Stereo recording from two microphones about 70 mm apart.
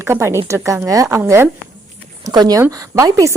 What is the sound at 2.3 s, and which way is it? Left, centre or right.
Speech, right.